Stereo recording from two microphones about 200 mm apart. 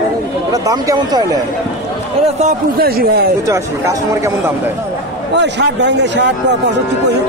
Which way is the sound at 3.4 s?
15° right (ahead or behind).